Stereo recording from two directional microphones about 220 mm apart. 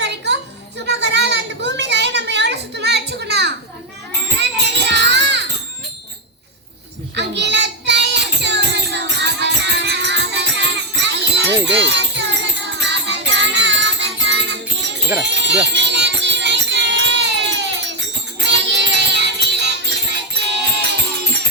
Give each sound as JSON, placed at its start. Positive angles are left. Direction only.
{"t": 0.3, "sound": "a sound", "side_deg": -55}
{"t": 4.4, "sound": "music", "side_deg": -50}
{"t": 7.2, "sound": "music", "side_deg": -50}